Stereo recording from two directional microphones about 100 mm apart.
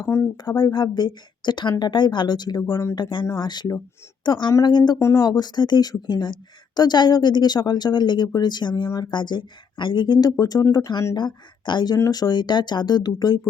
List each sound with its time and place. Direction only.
0.1 s speech: 25° left (ahead or behind)
0.4 s speech: 50° left (ahead or behind)
3.0 s speech: 50° left (ahead or behind)
4.9 s speech: 30° left (ahead or behind)